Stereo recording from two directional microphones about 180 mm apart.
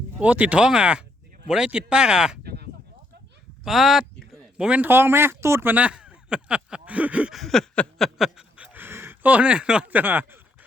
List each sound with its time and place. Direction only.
0.2 s speech: 5° right (ahead or behind)
2.4 s a sound: 60° right (ahead or behind)
3.6 s speech: centre (ahead or behind)